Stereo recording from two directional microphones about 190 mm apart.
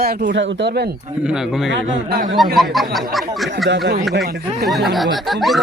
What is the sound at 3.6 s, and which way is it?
Speech, 65° right (ahead or behind).